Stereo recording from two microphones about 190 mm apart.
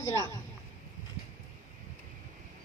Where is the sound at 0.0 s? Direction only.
15° left (ahead or behind).